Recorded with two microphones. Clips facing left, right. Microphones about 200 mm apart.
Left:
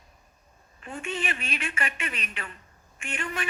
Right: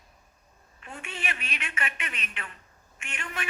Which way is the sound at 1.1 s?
30° left (ahead or behind).